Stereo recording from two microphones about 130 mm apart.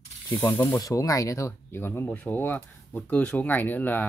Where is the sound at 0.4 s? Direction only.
15° left (ahead or behind).